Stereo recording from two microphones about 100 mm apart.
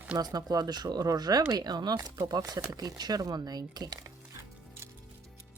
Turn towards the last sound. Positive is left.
turn(degrees=-40)  # may be behind; listen again after turning